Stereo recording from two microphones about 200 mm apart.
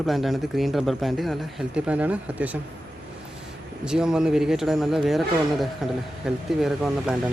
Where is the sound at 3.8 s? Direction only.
5° right (ahead or behind).